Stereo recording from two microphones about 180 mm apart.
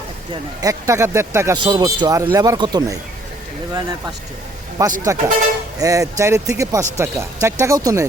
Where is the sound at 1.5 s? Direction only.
25° right (ahead or behind).